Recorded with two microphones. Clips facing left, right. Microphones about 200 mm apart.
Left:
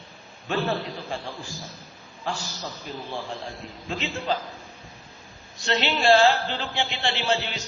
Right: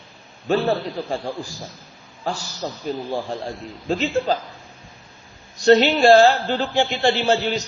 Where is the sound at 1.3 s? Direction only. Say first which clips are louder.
Right 8 dB; 15° right (ahead or behind).